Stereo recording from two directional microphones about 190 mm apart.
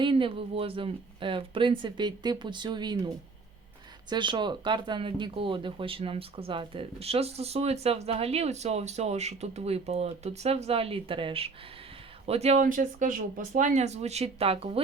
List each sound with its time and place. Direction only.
0.0 s speech: 25° right (ahead or behind)
4.1 s speech: 25° right (ahead or behind)